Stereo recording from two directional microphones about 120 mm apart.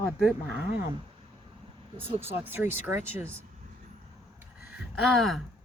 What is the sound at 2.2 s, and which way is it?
Speech, 20° right (ahead or behind).